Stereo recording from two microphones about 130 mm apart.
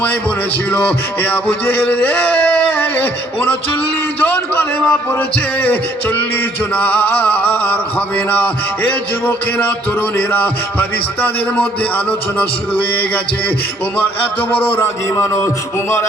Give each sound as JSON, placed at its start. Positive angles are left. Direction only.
{"t": 0.7, "sound": "male singing", "side_deg": 15}
{"t": 14.0, "sound": "male singing", "side_deg": 10}
{"t": 14.8, "sound": "a man's voice", "side_deg": 20}